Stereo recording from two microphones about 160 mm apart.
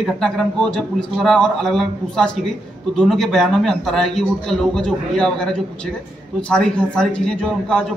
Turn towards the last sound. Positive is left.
turn(degrees=5)  # may be behind; listen again after turning